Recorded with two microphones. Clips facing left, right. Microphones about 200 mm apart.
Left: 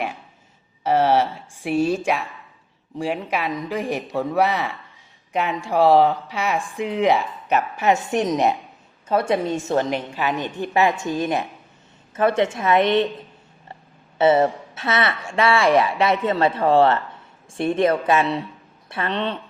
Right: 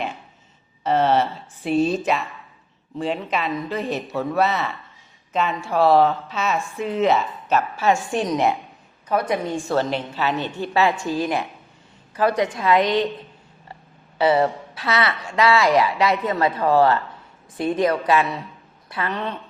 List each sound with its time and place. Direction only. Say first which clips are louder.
0.9 s a woman's voice: left 1 dB; 10° left (ahead or behind)
14.2 s a woman's voice: left 2 dB; 25° left (ahead or behind)